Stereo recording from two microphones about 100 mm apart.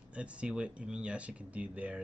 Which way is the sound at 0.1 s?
10° right (ahead or behind).